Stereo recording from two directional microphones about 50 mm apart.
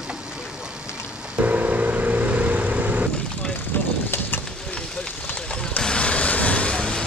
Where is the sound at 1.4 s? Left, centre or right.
Right.